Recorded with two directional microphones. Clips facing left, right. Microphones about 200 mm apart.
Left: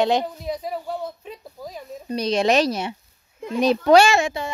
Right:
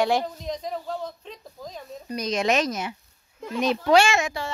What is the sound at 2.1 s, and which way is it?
Speech, 30° left (ahead or behind).